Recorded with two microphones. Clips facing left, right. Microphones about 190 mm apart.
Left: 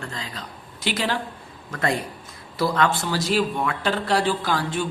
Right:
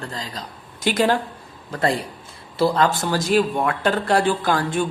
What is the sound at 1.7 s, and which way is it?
Speech, 30° right (ahead or behind).